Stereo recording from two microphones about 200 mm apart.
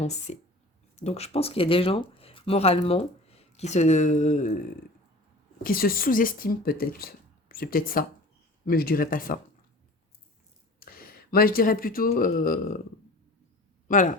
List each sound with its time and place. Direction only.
0.0 s speech: 35° left (ahead or behind)
5.6 s speech: 45° left (ahead or behind)
10.8 s speech: 45° left (ahead or behind)
13.8 s speech: 40° left (ahead or behind)